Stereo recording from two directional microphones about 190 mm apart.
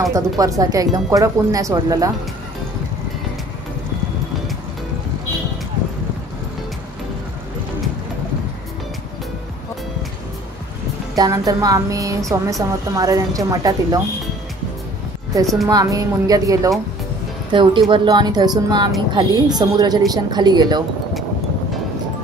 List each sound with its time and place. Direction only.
0.0 s speech: 15° right (ahead or behind)
11.1 s a woman's voice: 20° right (ahead or behind)
15.7 s a woman's voice: 20° right (ahead or behind)